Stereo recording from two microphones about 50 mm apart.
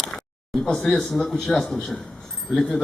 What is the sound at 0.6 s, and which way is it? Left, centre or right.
A man's voice, centre.